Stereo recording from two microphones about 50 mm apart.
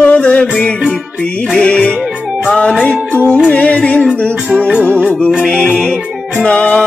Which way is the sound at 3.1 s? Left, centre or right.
Left.